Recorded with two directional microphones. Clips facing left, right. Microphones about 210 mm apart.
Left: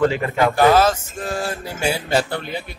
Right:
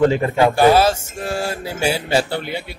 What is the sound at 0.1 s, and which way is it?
Speech, 30° right (ahead or behind).